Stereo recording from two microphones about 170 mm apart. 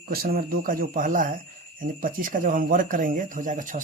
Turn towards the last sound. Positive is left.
turn(degrees=-50)  # may be behind; listen again after turning